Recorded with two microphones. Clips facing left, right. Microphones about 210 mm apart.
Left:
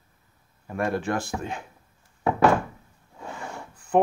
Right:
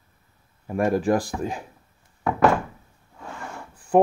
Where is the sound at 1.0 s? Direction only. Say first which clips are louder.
Right 6 dB; 35° right (ahead or behind).